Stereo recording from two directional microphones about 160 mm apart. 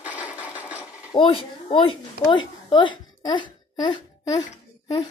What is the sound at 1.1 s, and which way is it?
A woman's voice, 35° left (ahead or behind).